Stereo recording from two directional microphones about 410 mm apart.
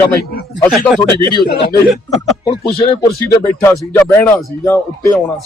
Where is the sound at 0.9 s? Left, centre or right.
Centre.